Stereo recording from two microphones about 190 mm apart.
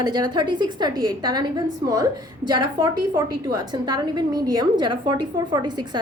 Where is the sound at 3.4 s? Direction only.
20° right (ahead or behind).